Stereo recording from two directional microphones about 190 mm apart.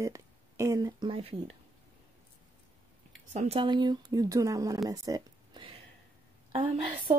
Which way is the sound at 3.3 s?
35° right (ahead or behind).